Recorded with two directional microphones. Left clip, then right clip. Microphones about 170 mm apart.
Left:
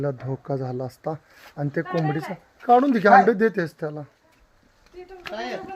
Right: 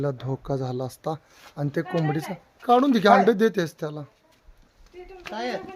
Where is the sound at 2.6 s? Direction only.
15° right (ahead or behind).